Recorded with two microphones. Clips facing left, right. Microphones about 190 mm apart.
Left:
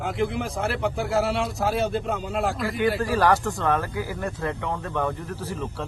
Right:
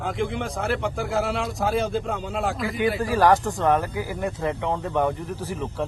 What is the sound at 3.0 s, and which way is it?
Speech, 15° right (ahead or behind).